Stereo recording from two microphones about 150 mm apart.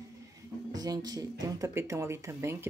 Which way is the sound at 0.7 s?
25° right (ahead or behind).